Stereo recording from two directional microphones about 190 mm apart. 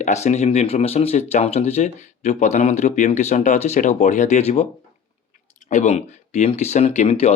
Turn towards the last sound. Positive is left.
turn(degrees=35)  # may be behind; listen again after turning